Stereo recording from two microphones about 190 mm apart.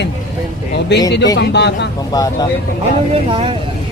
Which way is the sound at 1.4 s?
60° left (ahead or behind).